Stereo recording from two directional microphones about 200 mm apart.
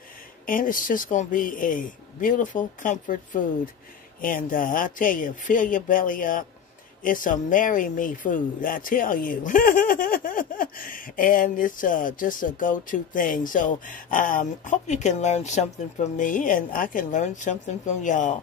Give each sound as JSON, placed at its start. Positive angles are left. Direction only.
{"t": 0.5, "sound": "speech", "side_deg": 45}